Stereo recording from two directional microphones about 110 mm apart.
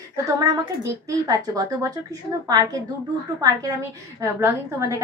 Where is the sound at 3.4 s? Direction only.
30° right (ahead or behind).